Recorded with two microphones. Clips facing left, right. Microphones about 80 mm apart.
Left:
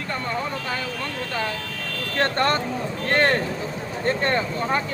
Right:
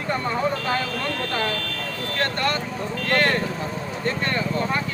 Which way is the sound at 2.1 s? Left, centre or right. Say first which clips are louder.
Left 3 dB; left.